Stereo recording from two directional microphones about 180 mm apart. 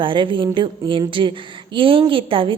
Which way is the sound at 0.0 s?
25° right (ahead or behind).